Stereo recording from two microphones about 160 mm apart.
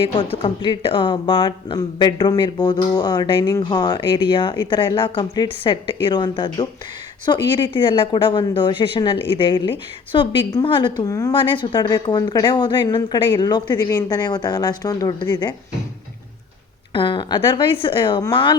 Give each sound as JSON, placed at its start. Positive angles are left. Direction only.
{"t": 0.2, "sound": "a woman's voice", "side_deg": 30}
{"t": 16.9, "sound": "a woman's voice", "side_deg": 30}